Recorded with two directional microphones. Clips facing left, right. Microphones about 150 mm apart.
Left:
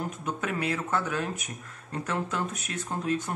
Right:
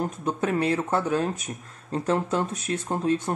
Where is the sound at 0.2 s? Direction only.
35° right (ahead or behind).